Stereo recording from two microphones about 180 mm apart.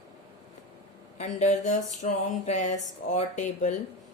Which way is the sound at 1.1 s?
40° left (ahead or behind).